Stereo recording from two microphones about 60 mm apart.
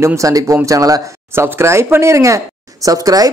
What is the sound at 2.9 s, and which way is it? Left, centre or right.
Speech, right.